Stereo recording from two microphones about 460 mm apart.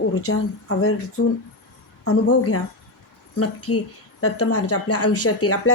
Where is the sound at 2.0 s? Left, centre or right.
Left.